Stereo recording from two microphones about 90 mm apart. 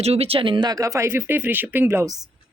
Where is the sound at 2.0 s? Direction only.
45° right (ahead or behind).